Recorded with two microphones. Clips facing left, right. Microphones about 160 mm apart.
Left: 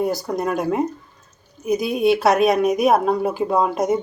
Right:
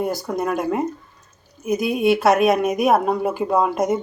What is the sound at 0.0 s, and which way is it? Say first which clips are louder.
A woman's voice: left 1 dB; centre (ahead or behind).